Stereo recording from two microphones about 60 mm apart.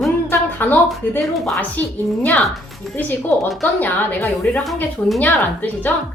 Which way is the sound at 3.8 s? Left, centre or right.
Left.